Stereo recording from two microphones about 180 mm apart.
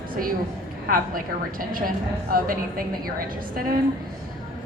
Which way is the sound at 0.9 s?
50° right (ahead or behind).